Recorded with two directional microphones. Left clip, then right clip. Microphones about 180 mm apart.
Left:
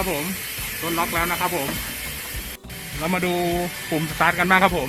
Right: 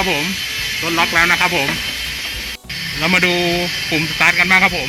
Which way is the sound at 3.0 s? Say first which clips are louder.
Right 9 dB; 5° left (ahead or behind).